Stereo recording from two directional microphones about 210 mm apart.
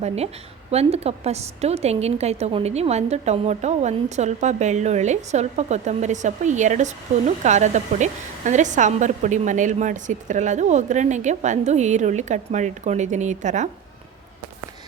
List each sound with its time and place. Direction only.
0.7 s a woman's voice: 30° right (ahead or behind)